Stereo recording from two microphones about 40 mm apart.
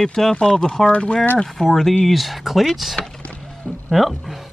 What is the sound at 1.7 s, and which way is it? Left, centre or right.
Speech, centre.